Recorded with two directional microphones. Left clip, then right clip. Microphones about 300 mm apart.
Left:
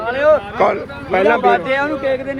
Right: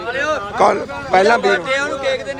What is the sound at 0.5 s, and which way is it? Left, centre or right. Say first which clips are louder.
Speech: right 2 dB; centre.